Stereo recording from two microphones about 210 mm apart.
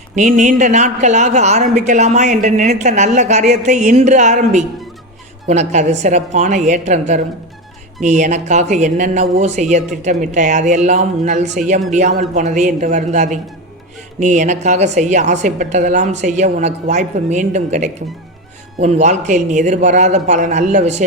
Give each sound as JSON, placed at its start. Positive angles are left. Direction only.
{"t": 0.2, "sound": "speech", "side_deg": -35}
{"t": 8.0, "sound": "speech", "side_deg": -35}